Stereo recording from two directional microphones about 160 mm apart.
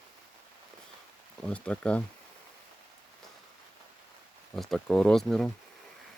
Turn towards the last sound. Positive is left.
turn(degrees=0)  # may be behind; listen again after turning